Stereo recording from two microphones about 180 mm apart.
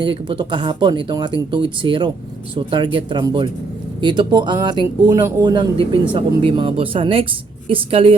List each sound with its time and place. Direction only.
0.0 s a woman's voice: 30° right (ahead or behind)